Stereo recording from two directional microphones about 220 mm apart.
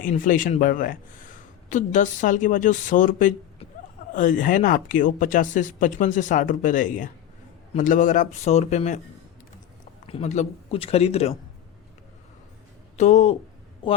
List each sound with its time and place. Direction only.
0.0 s speech: 35° left (ahead or behind)
10.1 s speech: 30° left (ahead or behind)
13.0 s speech: 30° left (ahead or behind)